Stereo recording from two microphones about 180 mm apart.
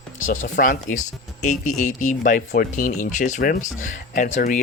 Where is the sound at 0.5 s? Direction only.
50° left (ahead or behind).